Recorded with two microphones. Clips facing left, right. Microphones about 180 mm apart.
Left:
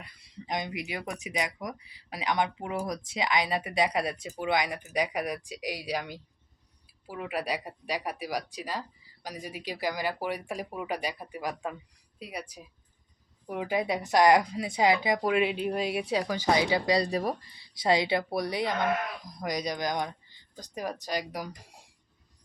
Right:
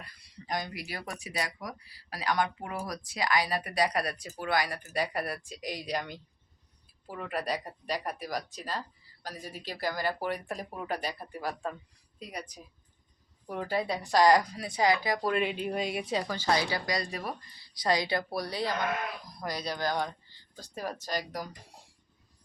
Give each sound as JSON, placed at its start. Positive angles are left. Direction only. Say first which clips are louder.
{"t": 0.0, "sound": "speech", "louder": "left 3 dB", "side_deg": 20}
{"t": 15.3, "sound": "speech", "louder": "left 3 dB", "side_deg": 5}
{"t": 17.8, "sound": "speech", "louder": "left 3 dB", "side_deg": 25}